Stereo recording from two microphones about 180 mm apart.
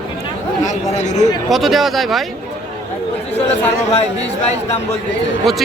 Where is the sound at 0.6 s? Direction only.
40° left (ahead or behind).